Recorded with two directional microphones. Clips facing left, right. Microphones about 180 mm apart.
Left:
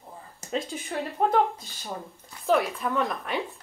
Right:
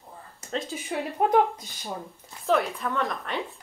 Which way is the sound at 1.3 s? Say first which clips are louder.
Right 2 dB; 15° right (ahead or behind).